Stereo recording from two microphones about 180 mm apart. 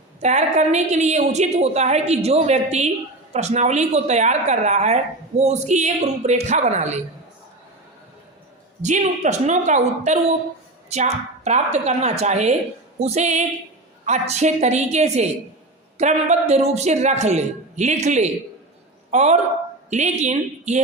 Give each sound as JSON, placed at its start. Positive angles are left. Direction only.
{"t": 0.2, "sound": "a woman's voice", "side_deg": -40}
{"t": 8.8, "sound": "a woman's voice", "side_deg": -40}